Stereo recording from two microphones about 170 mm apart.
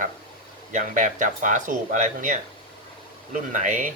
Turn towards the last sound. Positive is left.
turn(degrees=-50)  # may be behind; listen again after turning